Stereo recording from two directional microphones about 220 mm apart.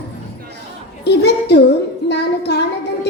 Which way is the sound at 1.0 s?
50° left (ahead or behind).